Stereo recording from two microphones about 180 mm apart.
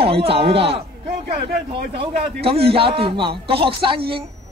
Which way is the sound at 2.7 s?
30° right (ahead or behind).